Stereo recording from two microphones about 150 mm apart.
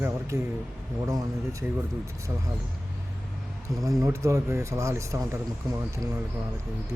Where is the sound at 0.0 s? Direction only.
20° right (ahead or behind).